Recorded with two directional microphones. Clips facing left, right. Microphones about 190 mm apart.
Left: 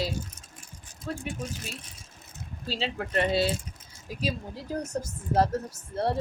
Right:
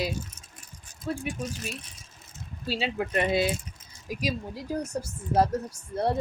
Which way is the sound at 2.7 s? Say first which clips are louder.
Right 2 dB; 15° right (ahead or behind).